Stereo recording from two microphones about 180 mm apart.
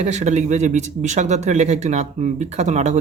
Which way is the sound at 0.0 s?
40° right (ahead or behind).